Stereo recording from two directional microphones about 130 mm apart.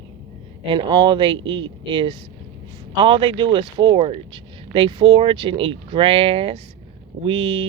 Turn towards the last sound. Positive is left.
turn(degrees=-45)  # may be behind; listen again after turning